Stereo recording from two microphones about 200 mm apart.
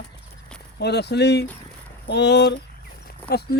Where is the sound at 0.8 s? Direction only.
55° left (ahead or behind).